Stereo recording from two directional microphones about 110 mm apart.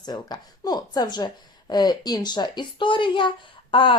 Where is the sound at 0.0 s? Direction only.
40° left (ahead or behind).